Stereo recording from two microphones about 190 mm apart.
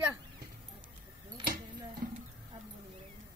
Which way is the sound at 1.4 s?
55° right (ahead or behind).